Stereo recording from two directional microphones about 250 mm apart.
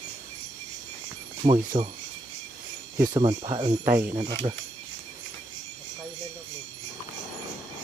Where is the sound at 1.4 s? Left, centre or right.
Right.